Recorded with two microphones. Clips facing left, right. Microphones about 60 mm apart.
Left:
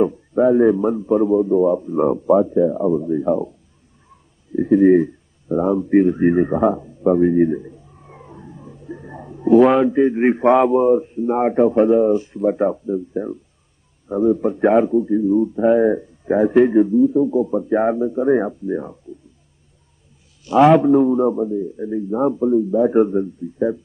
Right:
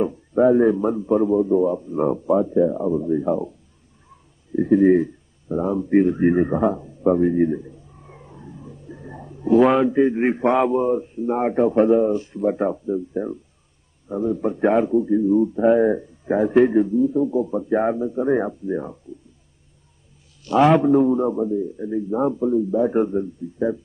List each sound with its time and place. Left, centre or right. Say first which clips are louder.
0.0 s a man's voice: left 2 dB; centre
4.1 s a sound: even; centre
5.0 s a man's voice: left 3 dB; centre
8.0 s roaring cats: left 4 dB; centre
8.5 s a sound: left 4 dB; centre
9.5 s a man's voice: left 3 dB; centre
14.0 s a man's voice: left 6 dB; centre
14.4 s a man's voice: left 3 dB; centre
20.4 s a man's voice: left 3 dB; centre